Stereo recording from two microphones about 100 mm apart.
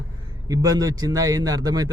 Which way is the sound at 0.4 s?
35° right (ahead or behind).